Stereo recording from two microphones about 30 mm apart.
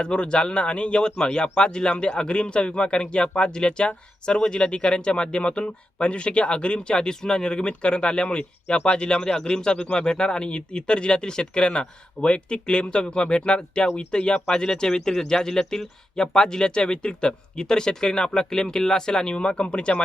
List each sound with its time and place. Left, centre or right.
0.0 s a man's voice: left
1.1 s a man's voice: left
9.1 s speech: centre
9.7 s a man's voice: left
14.6 s speech: left
19.3 s a man's voice: left